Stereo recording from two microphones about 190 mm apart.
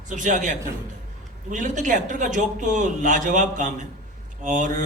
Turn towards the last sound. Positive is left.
turn(degrees=-40)  # may be behind; listen again after turning